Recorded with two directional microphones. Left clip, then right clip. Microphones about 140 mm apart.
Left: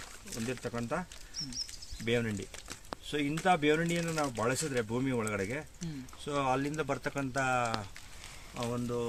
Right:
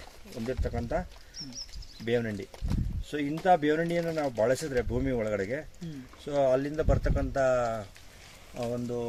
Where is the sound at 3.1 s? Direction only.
10° left (ahead or behind).